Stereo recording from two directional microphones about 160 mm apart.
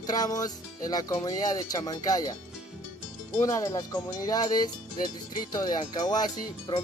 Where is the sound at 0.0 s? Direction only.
25° left (ahead or behind).